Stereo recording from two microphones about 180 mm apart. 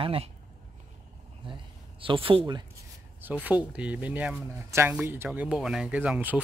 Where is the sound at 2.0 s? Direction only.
30° right (ahead or behind).